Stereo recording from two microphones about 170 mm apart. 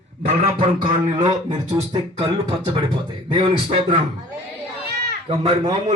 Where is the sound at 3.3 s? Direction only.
30° right (ahead or behind).